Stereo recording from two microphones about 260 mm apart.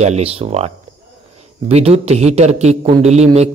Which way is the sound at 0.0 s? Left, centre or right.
Right.